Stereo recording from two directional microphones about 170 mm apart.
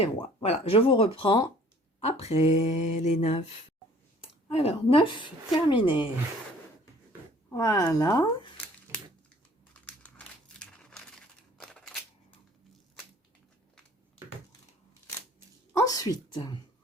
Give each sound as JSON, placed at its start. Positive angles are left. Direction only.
{"t": 0.4, "sound": "mantra", "side_deg": 35}
{"t": 4.4, "sound": "a woman's voice", "side_deg": 35}
{"t": 7.5, "sound": "a woman's voice", "side_deg": 20}
{"t": 9.8, "sound": "crumpling", "side_deg": 10}
{"t": 11.6, "sound": "a sound", "side_deg": 5}
{"t": 15.7, "sound": "speech", "side_deg": 20}